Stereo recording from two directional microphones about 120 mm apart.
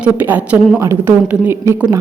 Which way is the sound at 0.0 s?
15° right (ahead or behind).